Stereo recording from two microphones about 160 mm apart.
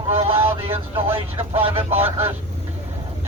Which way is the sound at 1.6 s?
35° right (ahead or behind).